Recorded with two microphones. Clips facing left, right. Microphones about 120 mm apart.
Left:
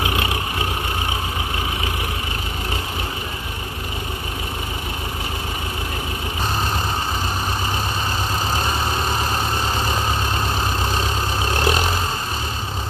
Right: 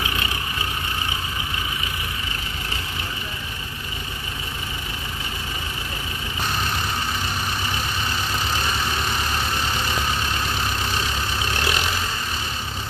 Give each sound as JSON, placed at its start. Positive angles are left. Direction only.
{"t": 8.5, "sound": "vehicle", "side_deg": 40}
{"t": 11.5, "sound": "vehicle", "side_deg": 40}